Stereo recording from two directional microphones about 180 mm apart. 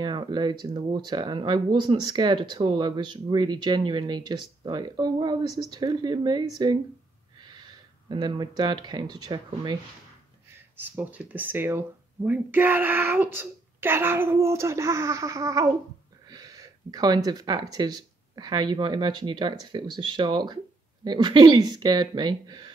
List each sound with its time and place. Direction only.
0.0 s speech: 25° right (ahead or behind)
7.4 s a sound: 25° right (ahead or behind)
9.1 s speech: 25° right (ahead or behind)
10.8 s speech: 10° right (ahead or behind)